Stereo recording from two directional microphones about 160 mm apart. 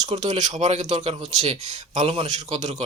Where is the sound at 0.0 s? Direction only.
45° right (ahead or behind).